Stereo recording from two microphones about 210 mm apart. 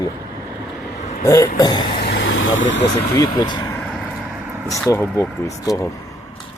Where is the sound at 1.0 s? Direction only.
35° left (ahead or behind).